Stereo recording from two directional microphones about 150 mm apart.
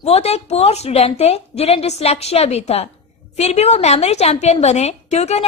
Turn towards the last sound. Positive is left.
turn(degrees=45)  # may be behind; listen again after turning